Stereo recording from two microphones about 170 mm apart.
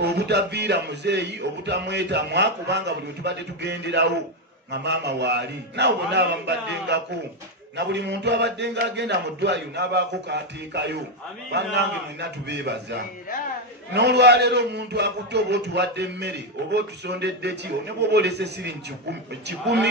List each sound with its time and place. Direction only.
0.0 s a man's voice: 75° right (ahead or behind)